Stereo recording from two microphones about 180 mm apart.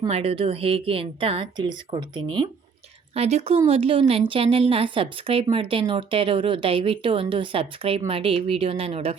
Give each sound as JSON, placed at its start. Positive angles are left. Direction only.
{"t": 0.1, "sound": "a woman's voice", "side_deg": -30}
{"t": 3.2, "sound": "a woman's voice", "side_deg": -35}